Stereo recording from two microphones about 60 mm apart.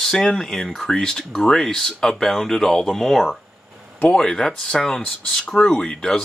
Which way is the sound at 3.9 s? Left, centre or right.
Centre.